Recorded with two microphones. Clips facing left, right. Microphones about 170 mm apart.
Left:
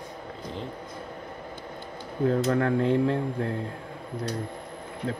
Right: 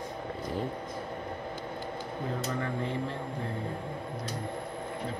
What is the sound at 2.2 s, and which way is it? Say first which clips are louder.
Speech: left 11 dB; 65° left (ahead or behind).